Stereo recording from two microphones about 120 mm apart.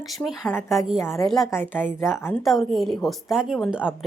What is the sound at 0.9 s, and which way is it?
A woman's voice, 25° left (ahead or behind).